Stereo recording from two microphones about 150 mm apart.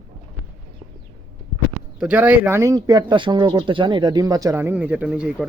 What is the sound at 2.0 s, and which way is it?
Speech, 10° right (ahead or behind).